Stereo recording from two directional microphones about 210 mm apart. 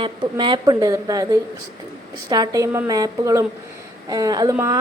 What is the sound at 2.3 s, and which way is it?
A woman's voice, 15° right (ahead or behind).